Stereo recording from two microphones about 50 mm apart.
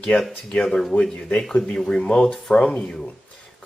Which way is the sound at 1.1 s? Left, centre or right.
Left.